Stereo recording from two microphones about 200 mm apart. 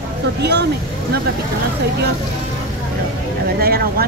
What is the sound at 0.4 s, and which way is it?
Speech, 55° right (ahead or behind).